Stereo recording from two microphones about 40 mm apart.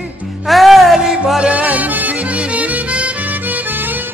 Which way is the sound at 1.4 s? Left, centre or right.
Right.